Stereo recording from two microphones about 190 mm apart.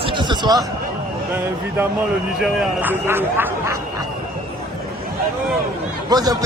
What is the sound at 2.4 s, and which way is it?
Speech, 5° right (ahead or behind).